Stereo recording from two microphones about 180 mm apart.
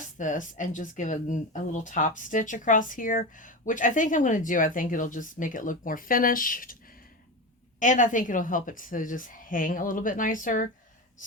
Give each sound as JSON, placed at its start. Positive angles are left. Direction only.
{"t": 0.2, "sound": "speech", "side_deg": 45}
{"t": 7.8, "sound": "speech", "side_deg": 45}